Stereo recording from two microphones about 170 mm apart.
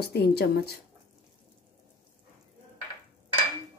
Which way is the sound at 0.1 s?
70° left (ahead or behind).